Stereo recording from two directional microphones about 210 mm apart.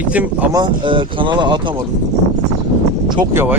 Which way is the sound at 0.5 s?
20° right (ahead or behind).